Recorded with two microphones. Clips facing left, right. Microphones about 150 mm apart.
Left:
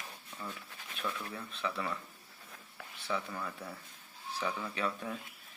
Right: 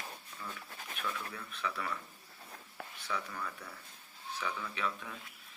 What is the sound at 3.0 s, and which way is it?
Speech, 25° left (ahead or behind).